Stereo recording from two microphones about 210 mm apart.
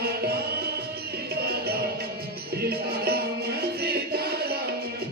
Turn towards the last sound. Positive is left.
turn(degrees=-50)  # may be behind; listen again after turning